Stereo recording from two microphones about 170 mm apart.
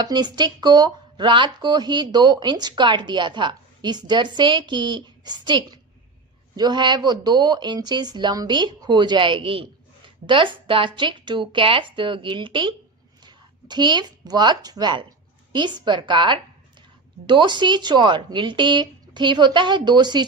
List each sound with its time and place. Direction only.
0.0 s speech: 25° right (ahead or behind)